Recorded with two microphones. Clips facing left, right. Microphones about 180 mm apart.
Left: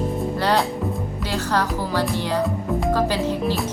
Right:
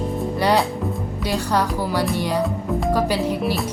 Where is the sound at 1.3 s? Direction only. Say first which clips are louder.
Right 1 dB; 15° right (ahead or behind).